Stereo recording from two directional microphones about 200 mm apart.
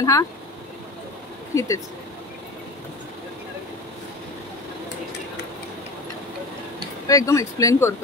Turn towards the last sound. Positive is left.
turn(degrees=15)  # may be behind; listen again after turning